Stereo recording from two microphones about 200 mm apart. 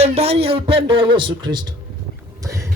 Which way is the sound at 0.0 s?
30° right (ahead or behind).